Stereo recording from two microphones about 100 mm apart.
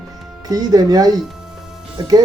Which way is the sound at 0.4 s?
40° right (ahead or behind).